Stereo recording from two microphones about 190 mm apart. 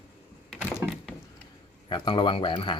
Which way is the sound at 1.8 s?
25° left (ahead or behind).